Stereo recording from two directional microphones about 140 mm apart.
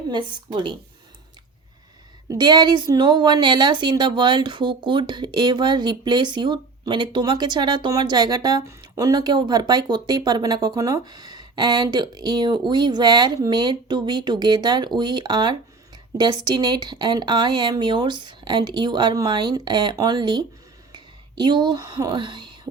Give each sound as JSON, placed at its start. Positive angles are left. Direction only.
{"t": 0.1, "sound": "speech", "side_deg": -35}
{"t": 2.2, "sound": "speech", "side_deg": -25}